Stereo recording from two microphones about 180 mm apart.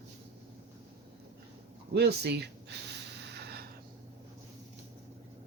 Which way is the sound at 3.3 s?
65° right (ahead or behind).